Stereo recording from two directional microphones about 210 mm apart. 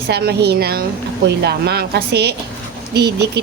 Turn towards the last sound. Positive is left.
turn(degrees=-50)  # may be behind; listen again after turning